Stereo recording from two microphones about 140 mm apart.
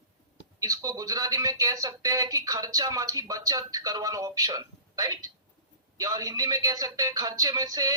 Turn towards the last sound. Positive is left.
turn(degrees=-25)  # may be behind; listen again after turning